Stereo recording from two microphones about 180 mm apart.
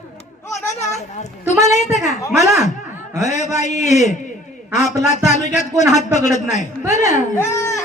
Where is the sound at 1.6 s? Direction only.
40° left (ahead or behind).